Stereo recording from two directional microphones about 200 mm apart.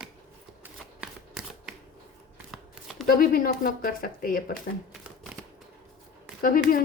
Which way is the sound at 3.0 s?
45° left (ahead or behind).